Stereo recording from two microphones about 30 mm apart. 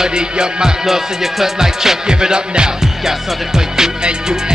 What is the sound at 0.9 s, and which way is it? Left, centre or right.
Music, centre.